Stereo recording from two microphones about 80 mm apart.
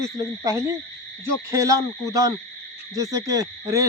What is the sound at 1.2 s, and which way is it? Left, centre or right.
Speech, right.